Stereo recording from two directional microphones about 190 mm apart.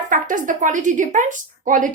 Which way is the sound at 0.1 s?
45° right (ahead or behind).